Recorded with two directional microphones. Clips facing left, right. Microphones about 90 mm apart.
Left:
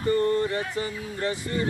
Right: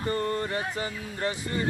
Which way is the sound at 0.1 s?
35° right (ahead or behind).